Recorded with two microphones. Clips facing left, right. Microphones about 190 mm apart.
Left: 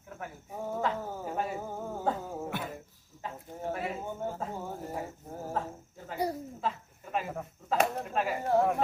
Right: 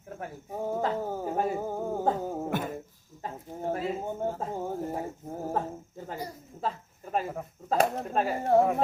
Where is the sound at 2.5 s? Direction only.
45° right (ahead or behind).